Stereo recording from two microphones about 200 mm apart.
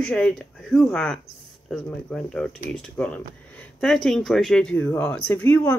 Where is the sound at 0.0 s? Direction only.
5° left (ahead or behind).